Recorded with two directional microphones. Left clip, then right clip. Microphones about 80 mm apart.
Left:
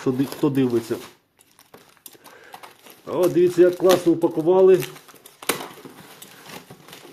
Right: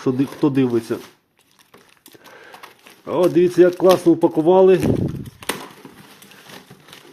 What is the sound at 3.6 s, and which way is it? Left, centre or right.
Speech, right.